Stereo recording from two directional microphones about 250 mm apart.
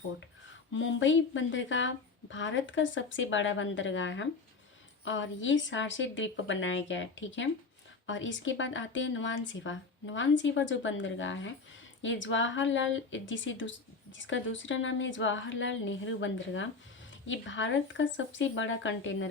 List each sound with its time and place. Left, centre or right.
0.7 s a woman's voice: left